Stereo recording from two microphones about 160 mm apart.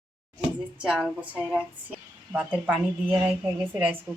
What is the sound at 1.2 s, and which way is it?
A woman's voice, 10° right (ahead or behind).